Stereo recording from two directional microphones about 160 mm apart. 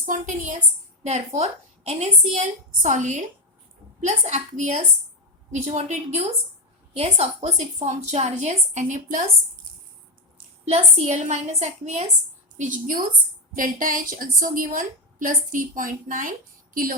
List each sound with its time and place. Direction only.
0.0 s a woman's voice: 50° right (ahead or behind)
10.7 s a woman's voice: 45° right (ahead or behind); by 17.0 s 65° right (ahead or behind)